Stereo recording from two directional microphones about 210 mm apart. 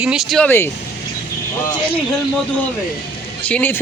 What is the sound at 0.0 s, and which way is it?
Speech, centre (ahead or behind).